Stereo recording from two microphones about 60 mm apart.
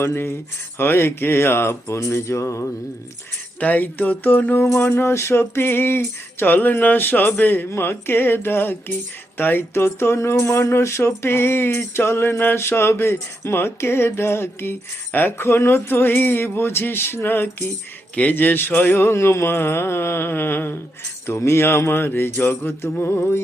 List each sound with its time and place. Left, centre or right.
0.0 s speech: left
3.6 s music: left
4.6 s music: left
9.4 s speech: left
18.1 s music: left
21.2 s music: left